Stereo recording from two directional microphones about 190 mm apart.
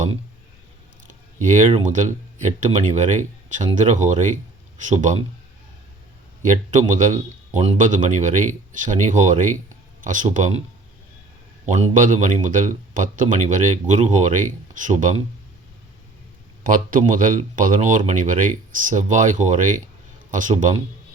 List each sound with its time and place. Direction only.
1.4 s a man's voice: 40° right (ahead or behind)
6.4 s a man's voice: 40° right (ahead or behind)
11.6 s a man's voice: 35° right (ahead or behind)
16.6 s a man's voice: 45° right (ahead or behind)